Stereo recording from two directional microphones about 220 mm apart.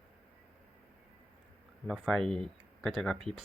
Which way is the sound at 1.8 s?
Centre (ahead or behind).